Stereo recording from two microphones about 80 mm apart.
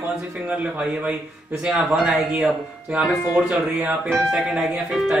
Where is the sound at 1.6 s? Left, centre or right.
Centre.